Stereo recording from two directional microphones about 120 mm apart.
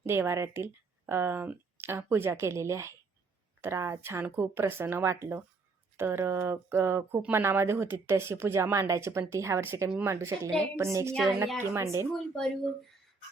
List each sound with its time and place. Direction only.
0.0 s speech: 20° right (ahead or behind)
12.1 s speech: 5° left (ahead or behind)